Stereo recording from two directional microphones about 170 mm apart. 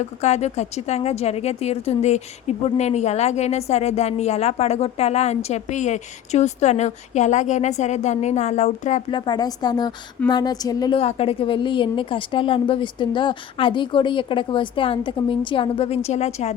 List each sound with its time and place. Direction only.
0.0 s a woman's voice: 40° left (ahead or behind)
9.0 s a woman's voice: 25° left (ahead or behind)
11.0 s a woman's voice: 35° left (ahead or behind)